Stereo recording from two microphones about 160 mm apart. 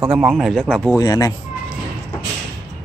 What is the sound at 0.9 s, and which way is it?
Speech, 20° left (ahead or behind).